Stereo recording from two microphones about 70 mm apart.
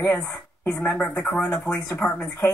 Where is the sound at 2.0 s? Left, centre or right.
Left.